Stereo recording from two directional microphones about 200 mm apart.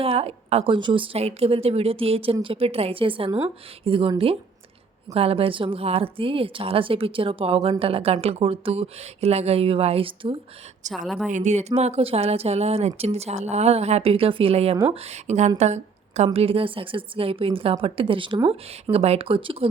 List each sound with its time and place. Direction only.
0.0 s a woman's voice: 30° right (ahead or behind)